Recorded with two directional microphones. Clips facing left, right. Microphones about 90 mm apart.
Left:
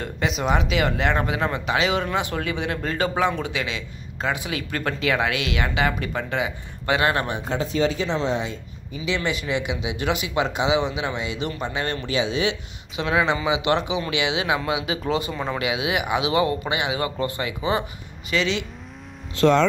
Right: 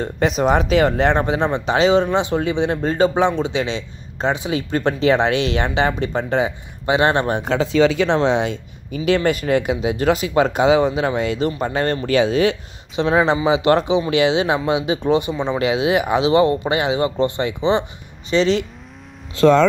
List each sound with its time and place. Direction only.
0.0 s a man's voice: 40° right (ahead or behind)
7.4 s speech: 90° right; by 9.1 s 70° right (ahead or behind)
9.1 s speech: 45° right (ahead or behind)
12.1 s speech: 50° right (ahead or behind)
12.9 s a man's voice: 35° right (ahead or behind)
15.6 s speech: 35° right (ahead or behind)